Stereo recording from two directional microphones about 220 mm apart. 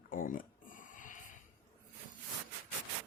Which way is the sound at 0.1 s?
40° left (ahead or behind).